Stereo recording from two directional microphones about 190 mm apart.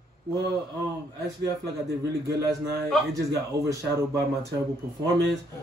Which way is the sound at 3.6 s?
15° right (ahead or behind).